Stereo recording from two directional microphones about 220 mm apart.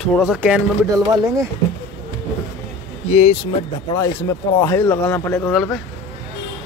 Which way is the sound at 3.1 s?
25° left (ahead or behind).